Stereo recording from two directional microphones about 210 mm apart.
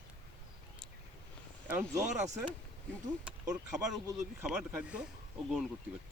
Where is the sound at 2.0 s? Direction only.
35° right (ahead or behind).